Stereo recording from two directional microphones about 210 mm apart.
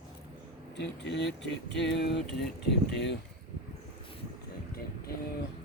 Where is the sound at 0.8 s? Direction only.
55° left (ahead or behind).